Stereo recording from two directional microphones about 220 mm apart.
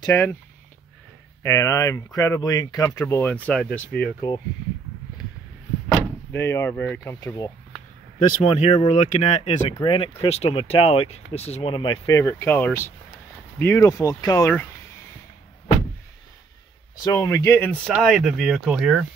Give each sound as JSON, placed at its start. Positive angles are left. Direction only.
{"t": 0.0, "sound": "speech", "side_deg": 10}
{"t": 1.4, "sound": "speech", "side_deg": 15}
{"t": 6.3, "sound": "speech", "side_deg": 10}
{"t": 8.5, "sound": "speech", "side_deg": 30}
{"t": 17.0, "sound": "speech", "side_deg": 15}